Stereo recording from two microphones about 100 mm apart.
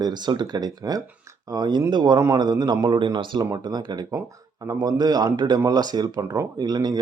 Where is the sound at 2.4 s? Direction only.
45° right (ahead or behind).